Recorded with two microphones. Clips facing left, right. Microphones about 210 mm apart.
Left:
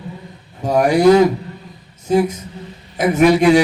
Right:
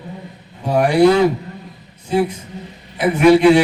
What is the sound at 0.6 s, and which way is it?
A man's voice, 45° left (ahead or behind).